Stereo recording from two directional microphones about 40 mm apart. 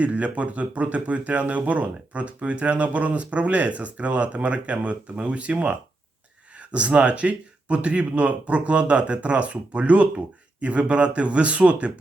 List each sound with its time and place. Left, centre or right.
0.0 s speech: right